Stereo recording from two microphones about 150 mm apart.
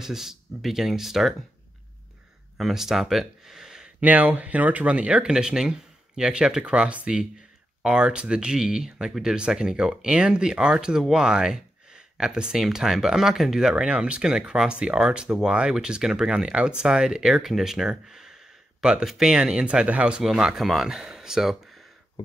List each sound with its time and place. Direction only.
0.0 s speech: 5° right (ahead or behind)
2.5 s speech: centre (ahead or behind)